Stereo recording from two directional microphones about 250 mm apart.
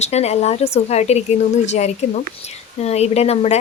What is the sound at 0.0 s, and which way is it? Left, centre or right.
Speech, left.